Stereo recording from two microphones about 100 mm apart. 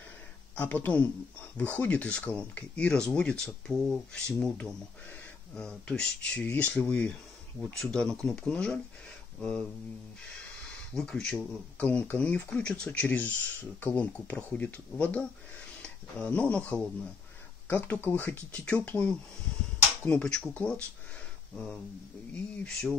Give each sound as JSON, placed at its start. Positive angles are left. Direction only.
{"t": 0.6, "sound": "speech", "side_deg": 15}
{"t": 11.0, "sound": "speech", "side_deg": 10}
{"t": 22.6, "sound": "speech", "side_deg": 10}